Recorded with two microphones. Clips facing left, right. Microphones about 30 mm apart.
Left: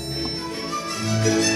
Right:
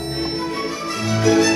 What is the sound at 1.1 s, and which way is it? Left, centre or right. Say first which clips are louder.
Music: right 5 dB; centre.